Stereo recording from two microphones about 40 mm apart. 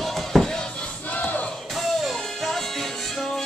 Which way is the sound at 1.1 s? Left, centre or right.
Left.